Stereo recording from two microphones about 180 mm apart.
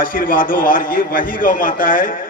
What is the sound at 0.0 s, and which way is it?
A man's voice, 50° left (ahead or behind).